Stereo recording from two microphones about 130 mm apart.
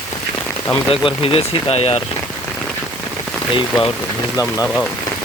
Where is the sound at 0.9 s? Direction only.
45° left (ahead or behind).